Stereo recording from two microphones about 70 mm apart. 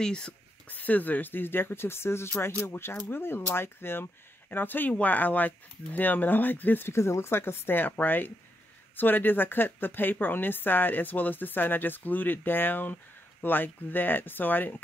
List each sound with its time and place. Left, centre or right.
0.0 s speech: centre
0.7 s a woman's voice: left
6.9 s a woman's voice: left